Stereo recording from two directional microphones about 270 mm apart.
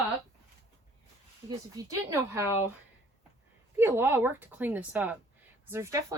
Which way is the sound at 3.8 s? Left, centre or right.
Centre.